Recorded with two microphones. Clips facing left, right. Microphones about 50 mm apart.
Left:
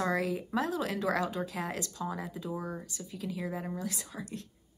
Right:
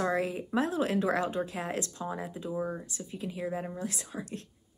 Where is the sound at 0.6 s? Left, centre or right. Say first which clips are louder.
Right 5 dB; right.